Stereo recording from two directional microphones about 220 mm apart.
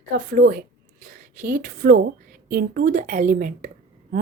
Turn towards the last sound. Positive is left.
turn(degrees=-40)  # may be behind; listen again after turning